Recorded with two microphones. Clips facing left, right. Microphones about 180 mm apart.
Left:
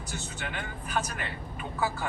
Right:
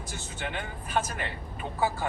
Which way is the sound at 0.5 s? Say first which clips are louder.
Right 2 dB; 30° right (ahead or behind).